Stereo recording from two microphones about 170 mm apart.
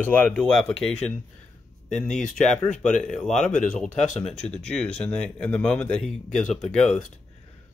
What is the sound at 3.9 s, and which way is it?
Speech, 45° left (ahead or behind).